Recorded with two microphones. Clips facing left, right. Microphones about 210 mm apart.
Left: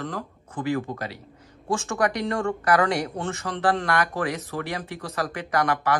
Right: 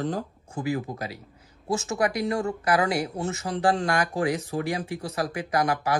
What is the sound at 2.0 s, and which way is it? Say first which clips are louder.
Speech: left 1 dB; 5° right (ahead or behind).